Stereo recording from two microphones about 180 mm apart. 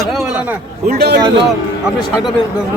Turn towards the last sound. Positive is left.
turn(degrees=-65)  # may be behind; listen again after turning